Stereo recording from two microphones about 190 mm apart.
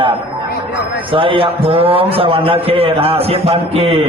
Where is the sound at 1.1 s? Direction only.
30° right (ahead or behind).